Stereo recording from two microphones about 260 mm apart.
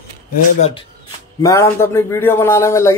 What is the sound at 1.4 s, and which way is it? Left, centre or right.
Speech, centre.